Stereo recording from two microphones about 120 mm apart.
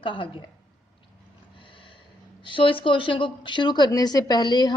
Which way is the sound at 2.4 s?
45° left (ahead or behind).